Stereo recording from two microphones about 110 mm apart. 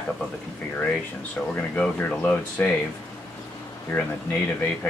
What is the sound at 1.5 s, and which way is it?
Speech, 15° left (ahead or behind).